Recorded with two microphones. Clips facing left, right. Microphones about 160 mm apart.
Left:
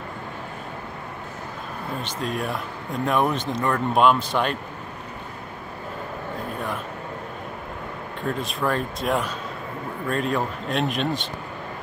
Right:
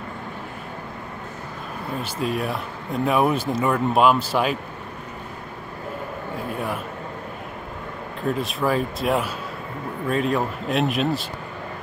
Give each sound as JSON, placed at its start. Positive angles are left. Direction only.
{"t": 2.0, "sound": "speech", "side_deg": -5}
{"t": 8.3, "sound": "speech", "side_deg": 0}